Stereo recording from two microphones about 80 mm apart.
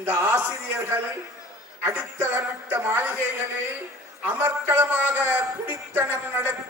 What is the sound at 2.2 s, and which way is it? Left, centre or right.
Speech, right.